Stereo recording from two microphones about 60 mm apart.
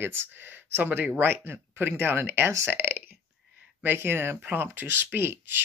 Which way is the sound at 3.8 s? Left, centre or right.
Right.